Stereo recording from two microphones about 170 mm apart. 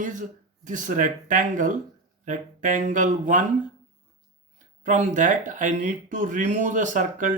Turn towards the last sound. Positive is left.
turn(degrees=-50)  # may be behind; listen again after turning